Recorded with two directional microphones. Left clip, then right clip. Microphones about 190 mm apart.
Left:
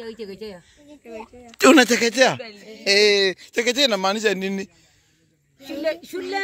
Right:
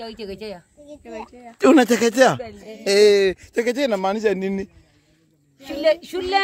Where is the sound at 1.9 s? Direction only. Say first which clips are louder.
Right 2 dB; 25° right (ahead or behind).